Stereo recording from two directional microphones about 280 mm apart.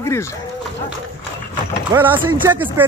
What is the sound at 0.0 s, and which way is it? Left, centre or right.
Speech, centre.